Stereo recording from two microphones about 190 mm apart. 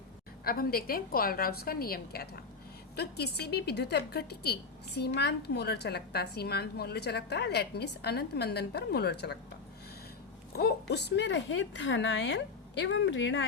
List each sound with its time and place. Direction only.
0.4 s a woman's voice: 50° left (ahead or behind)
10.6 s a woman's voice: 55° left (ahead or behind); by 13.4 s 75° left (ahead or behind)